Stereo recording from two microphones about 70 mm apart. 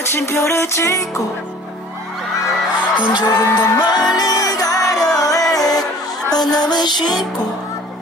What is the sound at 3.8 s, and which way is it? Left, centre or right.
Music, left.